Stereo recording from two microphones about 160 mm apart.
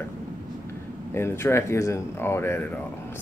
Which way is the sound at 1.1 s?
15° left (ahead or behind).